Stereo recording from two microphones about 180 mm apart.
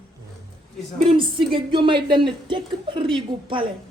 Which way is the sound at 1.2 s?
30° right (ahead or behind).